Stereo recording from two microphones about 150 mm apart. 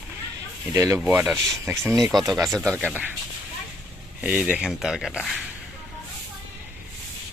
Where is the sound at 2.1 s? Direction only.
Centre (ahead or behind).